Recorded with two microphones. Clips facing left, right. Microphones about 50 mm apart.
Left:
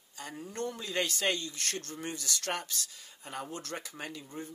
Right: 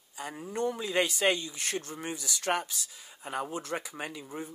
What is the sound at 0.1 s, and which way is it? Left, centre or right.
Speech, centre.